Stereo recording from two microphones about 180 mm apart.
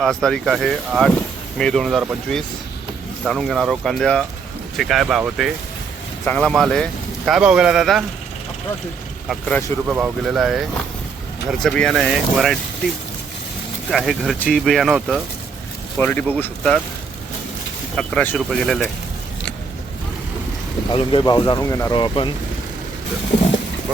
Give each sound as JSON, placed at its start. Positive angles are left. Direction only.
{"t": 0.0, "sound": "speech", "side_deg": 5}
{"t": 9.3, "sound": "speech", "side_deg": 10}
{"t": 9.9, "sound": "speech", "side_deg": -5}
{"t": 11.6, "sound": "speech", "side_deg": 5}
{"t": 13.9, "sound": "speech", "side_deg": 0}
{"t": 17.9, "sound": "speech", "side_deg": 5}
{"t": 20.9, "sound": "speech", "side_deg": 30}